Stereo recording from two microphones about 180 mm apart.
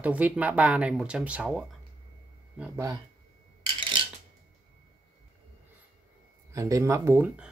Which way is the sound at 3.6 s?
25° right (ahead or behind).